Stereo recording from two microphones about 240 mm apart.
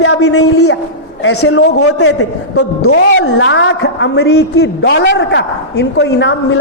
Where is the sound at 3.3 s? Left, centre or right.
Left.